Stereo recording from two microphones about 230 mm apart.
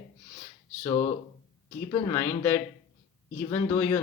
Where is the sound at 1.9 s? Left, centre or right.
Centre.